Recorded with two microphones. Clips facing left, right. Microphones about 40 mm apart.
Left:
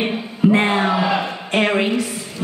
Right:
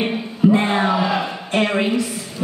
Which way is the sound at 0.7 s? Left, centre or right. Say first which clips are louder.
Even; centre.